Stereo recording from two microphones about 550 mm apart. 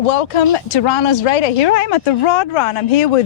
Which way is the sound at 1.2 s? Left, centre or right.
Left.